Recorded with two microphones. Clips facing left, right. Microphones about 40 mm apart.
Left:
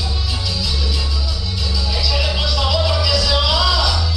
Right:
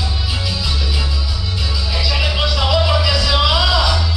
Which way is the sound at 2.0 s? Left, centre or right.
Centre.